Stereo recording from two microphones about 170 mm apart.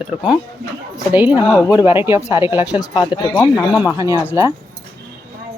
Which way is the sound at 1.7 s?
10° right (ahead or behind).